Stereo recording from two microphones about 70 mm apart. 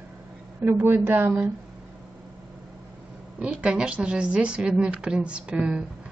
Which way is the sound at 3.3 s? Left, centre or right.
Centre.